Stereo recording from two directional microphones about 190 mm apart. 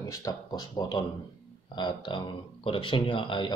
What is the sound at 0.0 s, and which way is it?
Speech, 20° left (ahead or behind).